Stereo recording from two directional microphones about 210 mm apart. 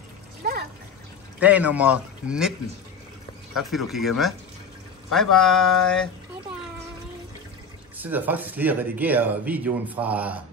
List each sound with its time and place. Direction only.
0.4 s trickle: 45° right (ahead or behind)
1.4 s speech: 5° right (ahead or behind)
3.5 s a sound: centre (ahead or behind)
8.0 s speech: 10° right (ahead or behind)